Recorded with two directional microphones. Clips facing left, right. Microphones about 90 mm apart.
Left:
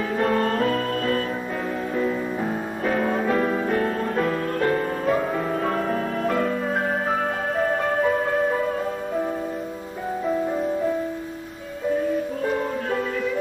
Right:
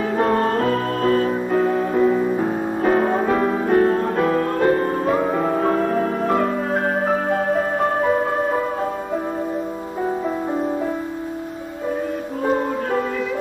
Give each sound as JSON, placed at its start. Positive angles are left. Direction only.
{"t": 0.3, "sound": "music", "side_deg": -35}
{"t": 2.8, "sound": "music", "side_deg": -40}